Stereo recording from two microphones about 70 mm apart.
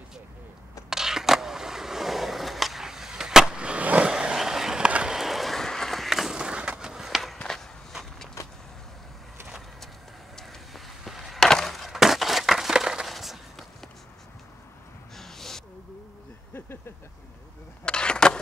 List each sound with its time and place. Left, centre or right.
0.8 s skateboard: centre
7.4 s walk: centre
10.3 s a sound: centre
15.1 s owl: centre
16.5 s vehicle: left
17.8 s a sound: centre